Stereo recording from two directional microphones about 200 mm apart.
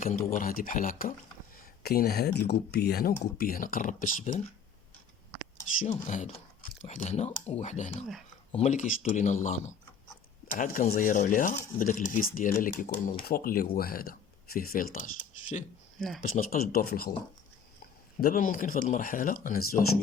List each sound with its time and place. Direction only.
0.0 s speech: 45° left (ahead or behind)
6.1 s speech: 35° left (ahead or behind)
16.0 s speech: centre (ahead or behind)
16.2 s speech: 45° left (ahead or behind)
18.2 s speech: 45° left (ahead or behind)